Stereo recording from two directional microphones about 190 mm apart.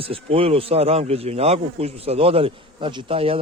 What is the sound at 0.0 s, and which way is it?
Speech, 30° right (ahead or behind).